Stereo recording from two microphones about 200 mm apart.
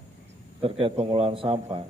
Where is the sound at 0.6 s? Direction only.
30° right (ahead or behind).